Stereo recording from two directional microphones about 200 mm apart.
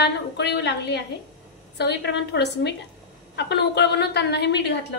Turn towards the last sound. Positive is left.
turn(degrees=60)  # may be behind; listen again after turning